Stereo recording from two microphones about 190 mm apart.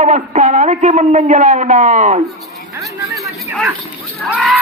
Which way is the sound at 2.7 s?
15° right (ahead or behind).